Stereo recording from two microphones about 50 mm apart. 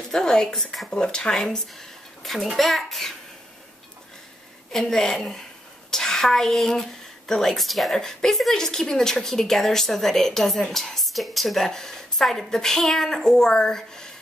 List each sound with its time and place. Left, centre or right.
0.1 s a woman's voice: centre
2.2 s a child's voice: centre
4.7 s a woman's voice: centre